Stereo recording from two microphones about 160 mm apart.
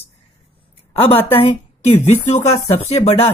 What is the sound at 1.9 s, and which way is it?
Speech, 45° left (ahead or behind).